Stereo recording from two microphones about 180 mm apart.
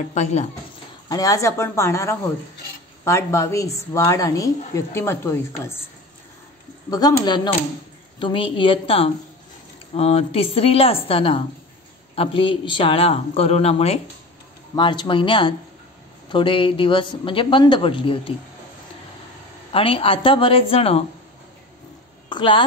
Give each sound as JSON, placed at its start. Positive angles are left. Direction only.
{"t": 0.1, "sound": "speech", "side_deg": 40}
{"t": 1.0, "sound": "a woman's voice", "side_deg": 20}
{"t": 6.9, "sound": "speech", "side_deg": 20}
{"t": 19.7, "sound": "speech", "side_deg": 30}
{"t": 22.3, "sound": "speech", "side_deg": 25}